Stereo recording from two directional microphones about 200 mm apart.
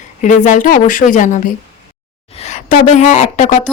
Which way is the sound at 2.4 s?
35° left (ahead or behind).